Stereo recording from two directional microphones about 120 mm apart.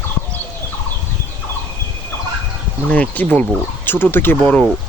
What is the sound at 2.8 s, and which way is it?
Speech, 10° left (ahead or behind).